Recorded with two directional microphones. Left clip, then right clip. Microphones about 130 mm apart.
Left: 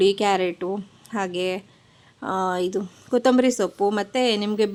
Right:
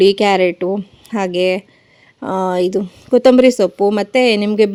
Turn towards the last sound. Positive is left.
turn(degrees=-45)  # may be behind; listen again after turning